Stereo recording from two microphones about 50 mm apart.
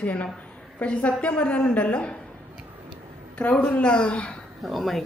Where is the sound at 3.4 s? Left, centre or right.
Left.